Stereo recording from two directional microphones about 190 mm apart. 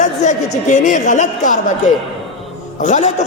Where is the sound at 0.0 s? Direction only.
40° left (ahead or behind).